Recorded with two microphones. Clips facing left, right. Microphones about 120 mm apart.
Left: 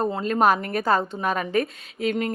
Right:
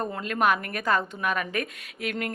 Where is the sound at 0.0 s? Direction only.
30° left (ahead or behind).